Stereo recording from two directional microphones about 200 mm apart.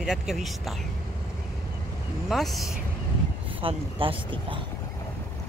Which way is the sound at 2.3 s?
Centre (ahead or behind).